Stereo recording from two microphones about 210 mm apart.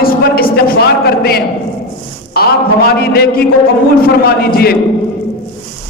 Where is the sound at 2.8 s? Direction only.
45° left (ahead or behind).